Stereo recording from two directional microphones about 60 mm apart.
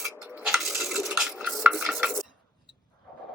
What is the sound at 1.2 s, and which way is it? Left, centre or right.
Stir, centre.